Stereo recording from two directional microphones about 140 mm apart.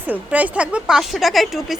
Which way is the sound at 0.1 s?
10° right (ahead or behind).